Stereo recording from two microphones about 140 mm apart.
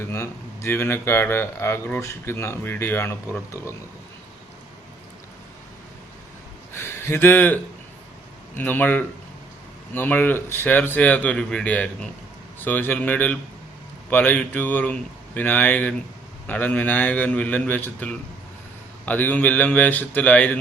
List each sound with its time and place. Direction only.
0.1 s speech: 20° left (ahead or behind)
6.7 s speech: 15° left (ahead or behind)